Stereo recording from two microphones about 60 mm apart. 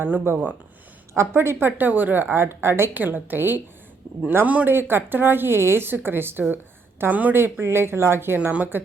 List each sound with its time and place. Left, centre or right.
0.0 s speech: right
1.1 s a woman's voice: right
2.9 s speech: right
4.4 s speech: right
4.7 s speech: right
7.1 s speech: right
7.6 s a woman's voice: right
8.4 s speech: right